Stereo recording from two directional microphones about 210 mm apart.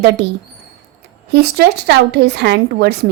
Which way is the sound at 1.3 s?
50° right (ahead or behind).